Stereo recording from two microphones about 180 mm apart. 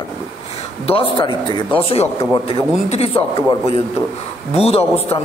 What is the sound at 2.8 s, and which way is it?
Speech, 35° left (ahead or behind).